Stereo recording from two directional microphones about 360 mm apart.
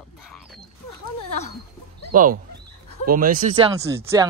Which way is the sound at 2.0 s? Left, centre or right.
Right.